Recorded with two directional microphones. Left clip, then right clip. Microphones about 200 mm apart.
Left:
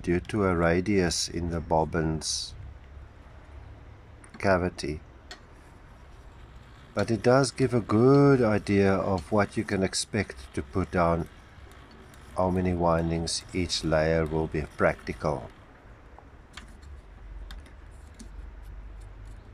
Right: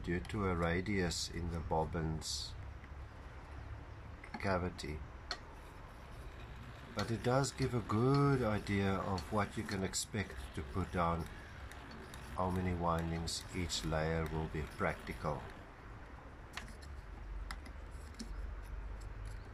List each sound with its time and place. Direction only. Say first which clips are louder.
0.3 s speech: left 12 dB; 55° left (ahead or behind)
4.4 s speech: left 13 dB; 55° left (ahead or behind)
7.0 s speech: left 13 dB; 55° left (ahead or behind)
12.6 s speech: left 12 dB; 55° left (ahead or behind)